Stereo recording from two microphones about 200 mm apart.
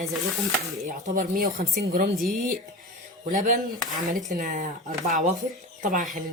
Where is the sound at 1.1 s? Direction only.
45° right (ahead or behind).